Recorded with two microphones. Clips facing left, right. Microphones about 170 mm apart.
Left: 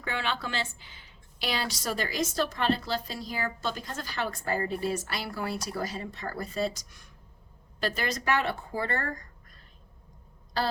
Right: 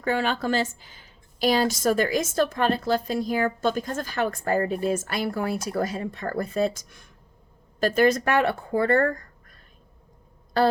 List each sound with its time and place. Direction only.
0.0 s a woman's voice: 45° right (ahead or behind)